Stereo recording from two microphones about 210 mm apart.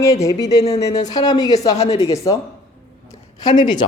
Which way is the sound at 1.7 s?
30° left (ahead or behind).